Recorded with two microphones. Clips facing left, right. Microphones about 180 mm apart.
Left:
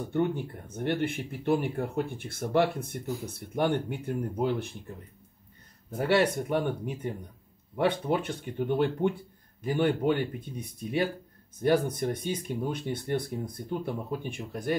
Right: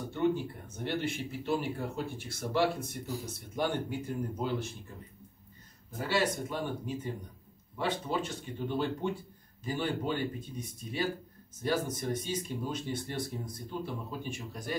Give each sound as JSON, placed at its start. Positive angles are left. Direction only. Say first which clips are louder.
{"t": 0.1, "sound": "speech", "louder": "left 1 dB", "side_deg": 55}
{"t": 5.9, "sound": "speech", "louder": "left 6 dB", "side_deg": 60}